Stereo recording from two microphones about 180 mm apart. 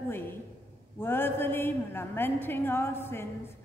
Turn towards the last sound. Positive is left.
turn(degrees=15)  # may be behind; listen again after turning